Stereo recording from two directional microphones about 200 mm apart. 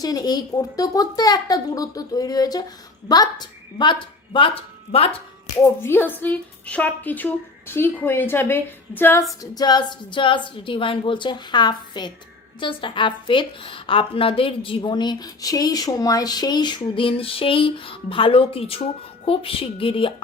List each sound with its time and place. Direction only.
0.0 s a woman's voice: 20° left (ahead or behind)
5.6 s a woman's voice: 10° left (ahead or behind); by 20.2 s 25° left (ahead or behind)